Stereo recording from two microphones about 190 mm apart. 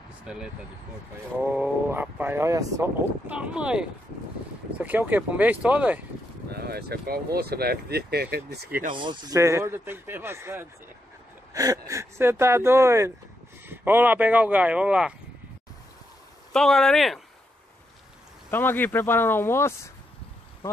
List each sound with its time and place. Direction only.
0.2 s speech: 5° right (ahead or behind)
6.5 s speech: 55° right (ahead or behind)
8.9 s speech: 25° right (ahead or behind); by 15.1 s 5° right (ahead or behind)
16.5 s speech: 5° left (ahead or behind)
18.5 s speech: 10° left (ahead or behind)